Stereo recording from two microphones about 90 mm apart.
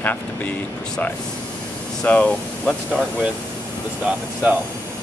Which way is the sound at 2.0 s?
15° left (ahead or behind).